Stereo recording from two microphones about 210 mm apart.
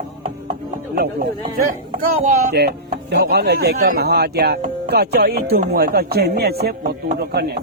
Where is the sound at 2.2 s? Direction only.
50° right (ahead or behind).